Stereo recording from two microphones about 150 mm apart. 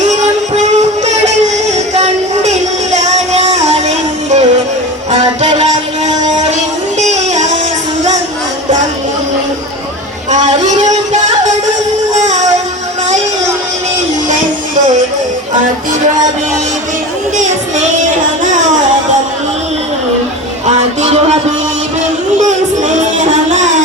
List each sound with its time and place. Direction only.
0.0 s music: 50° right (ahead or behind)
7.1 s music: 50° right (ahead or behind)
10.3 s music: 55° right (ahead or behind)
17.3 s child singing: 55° right (ahead or behind)
20.7 s music: 45° right (ahead or behind)
22.4 s a sound: 55° right (ahead or behind)